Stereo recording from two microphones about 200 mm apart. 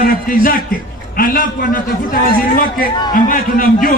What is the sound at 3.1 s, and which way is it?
Speech, 45° left (ahead or behind).